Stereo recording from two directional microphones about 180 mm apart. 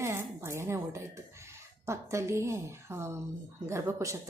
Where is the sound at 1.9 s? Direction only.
15° right (ahead or behind).